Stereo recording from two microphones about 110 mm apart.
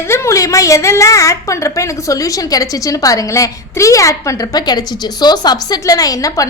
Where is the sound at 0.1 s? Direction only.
25° left (ahead or behind).